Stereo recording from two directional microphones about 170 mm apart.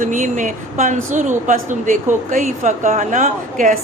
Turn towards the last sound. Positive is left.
turn(degrees=-50)  # may be behind; listen again after turning